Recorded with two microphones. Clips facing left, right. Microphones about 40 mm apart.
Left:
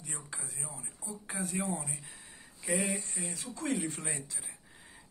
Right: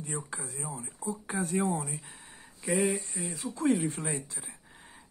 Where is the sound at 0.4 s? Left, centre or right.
Right.